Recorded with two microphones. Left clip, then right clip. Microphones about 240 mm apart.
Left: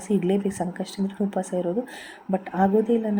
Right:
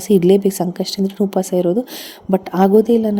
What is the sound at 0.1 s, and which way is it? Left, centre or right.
A woman's voice, right.